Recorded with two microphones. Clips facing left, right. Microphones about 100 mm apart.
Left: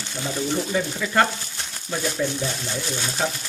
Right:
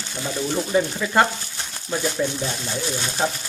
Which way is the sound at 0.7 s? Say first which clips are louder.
Right 6 dB; 20° right (ahead or behind).